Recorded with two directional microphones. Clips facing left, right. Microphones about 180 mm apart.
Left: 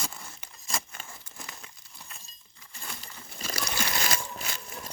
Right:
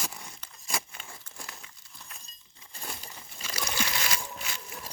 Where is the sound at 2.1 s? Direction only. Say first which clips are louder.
Right 1 dB; centre (ahead or behind).